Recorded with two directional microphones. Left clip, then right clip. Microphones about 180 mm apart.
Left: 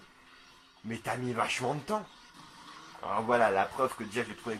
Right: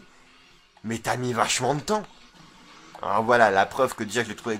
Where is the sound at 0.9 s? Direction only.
30° right (ahead or behind).